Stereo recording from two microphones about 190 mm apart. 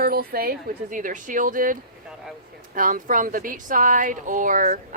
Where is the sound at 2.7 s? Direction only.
45° right (ahead or behind).